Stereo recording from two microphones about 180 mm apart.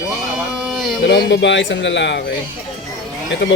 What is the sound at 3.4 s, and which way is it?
Speech, 75° left (ahead or behind).